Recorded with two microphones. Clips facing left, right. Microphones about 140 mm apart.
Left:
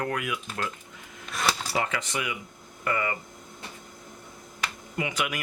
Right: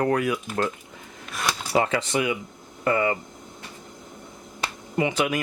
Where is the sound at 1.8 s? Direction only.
30° right (ahead or behind).